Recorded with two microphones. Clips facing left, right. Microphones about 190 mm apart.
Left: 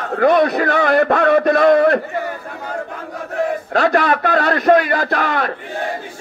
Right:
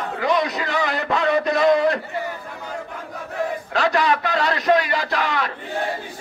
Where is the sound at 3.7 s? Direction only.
50° left (ahead or behind).